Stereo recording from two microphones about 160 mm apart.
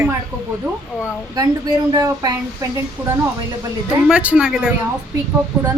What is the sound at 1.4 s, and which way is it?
A woman's voice, 25° right (ahead or behind).